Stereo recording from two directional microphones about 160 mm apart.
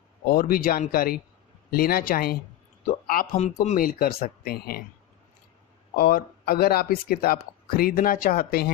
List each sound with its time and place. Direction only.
0.3 s speech: 65° left (ahead or behind)
3.3 s speech: 45° left (ahead or behind)
3.8 s speech: 65° left (ahead or behind)
6.0 s speech: 70° left (ahead or behind)